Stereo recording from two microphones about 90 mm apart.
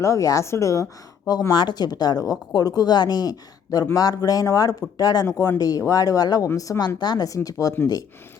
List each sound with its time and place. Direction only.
0.0 s speech: 35° left (ahead or behind)
1.3 s speech: 50° left (ahead or behind)
7.3 s speech: 40° left (ahead or behind)